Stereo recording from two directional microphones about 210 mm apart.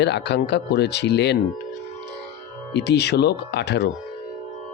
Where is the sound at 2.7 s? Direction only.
55° left (ahead or behind).